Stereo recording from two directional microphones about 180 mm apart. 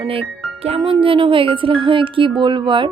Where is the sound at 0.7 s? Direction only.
30° right (ahead or behind).